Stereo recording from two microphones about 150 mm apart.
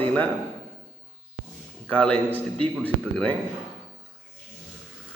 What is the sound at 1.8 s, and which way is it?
A man's voice, 10° left (ahead or behind).